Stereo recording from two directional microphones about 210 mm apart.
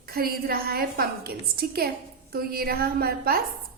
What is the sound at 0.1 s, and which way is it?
A woman's voice, 45° right (ahead or behind).